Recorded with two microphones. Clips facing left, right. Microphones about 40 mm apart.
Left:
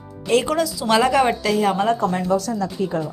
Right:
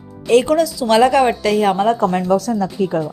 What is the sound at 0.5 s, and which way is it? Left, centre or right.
Speech, centre.